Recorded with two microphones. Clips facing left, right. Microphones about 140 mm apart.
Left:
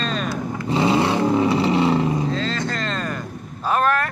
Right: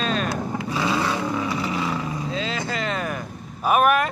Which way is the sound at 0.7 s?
25° left (ahead or behind).